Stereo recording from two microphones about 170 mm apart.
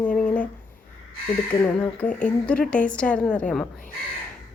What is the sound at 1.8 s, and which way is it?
Speech, 10° left (ahead or behind).